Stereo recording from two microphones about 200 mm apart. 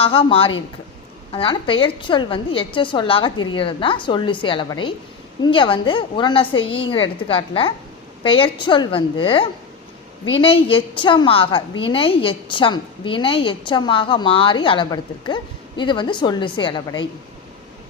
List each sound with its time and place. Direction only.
0.0 s a woman's voice: 25° left (ahead or behind)